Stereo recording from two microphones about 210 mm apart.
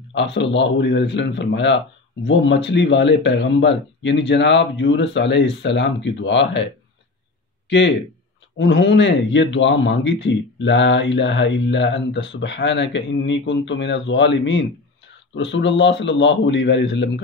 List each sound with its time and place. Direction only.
0.1 s a man's voice: 60° left (ahead or behind)
8.5 s a man's voice: 55° left (ahead or behind)